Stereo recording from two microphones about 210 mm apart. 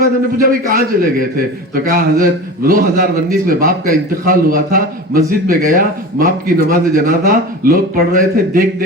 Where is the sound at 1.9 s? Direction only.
40° right (ahead or behind).